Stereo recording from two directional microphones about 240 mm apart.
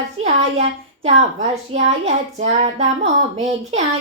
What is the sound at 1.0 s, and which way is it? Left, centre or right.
A child's voice, right.